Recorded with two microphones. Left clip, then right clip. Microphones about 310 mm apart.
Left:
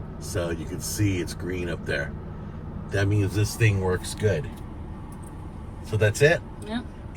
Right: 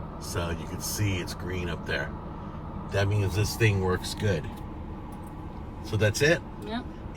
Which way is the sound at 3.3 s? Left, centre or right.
Centre.